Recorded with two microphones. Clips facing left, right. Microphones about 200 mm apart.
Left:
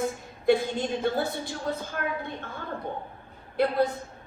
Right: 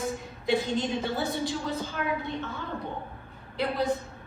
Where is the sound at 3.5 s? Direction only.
50° left (ahead or behind).